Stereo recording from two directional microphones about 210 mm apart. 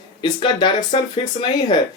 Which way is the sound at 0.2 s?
20° left (ahead or behind).